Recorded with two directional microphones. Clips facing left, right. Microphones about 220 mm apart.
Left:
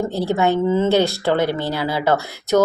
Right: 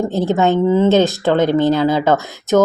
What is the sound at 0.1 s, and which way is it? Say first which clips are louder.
A woman's voice: right 3 dB; 20° right (ahead or behind).